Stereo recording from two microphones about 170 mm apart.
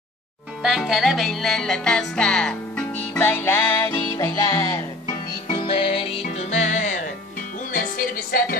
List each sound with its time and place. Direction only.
0.6 s music: centre (ahead or behind); by 4.7 s 20° left (ahead or behind)
5.0 s music: 30° left (ahead or behind); by 8.5 s 60° left (ahead or behind)